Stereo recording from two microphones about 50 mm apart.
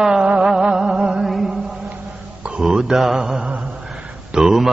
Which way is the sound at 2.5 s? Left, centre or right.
Centre.